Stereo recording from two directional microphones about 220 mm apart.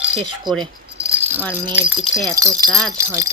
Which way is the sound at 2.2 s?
15° right (ahead or behind).